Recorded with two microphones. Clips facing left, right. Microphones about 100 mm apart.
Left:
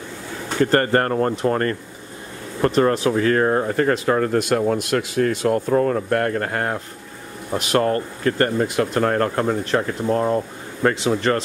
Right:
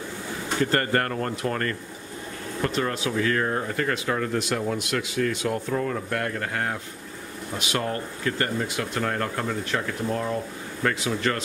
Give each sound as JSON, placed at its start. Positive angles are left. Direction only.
{"t": 0.6, "sound": "speech", "side_deg": 40}
{"t": 2.6, "sound": "speech", "side_deg": 45}